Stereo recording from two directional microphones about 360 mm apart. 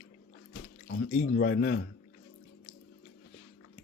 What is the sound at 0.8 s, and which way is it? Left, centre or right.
Speech, left.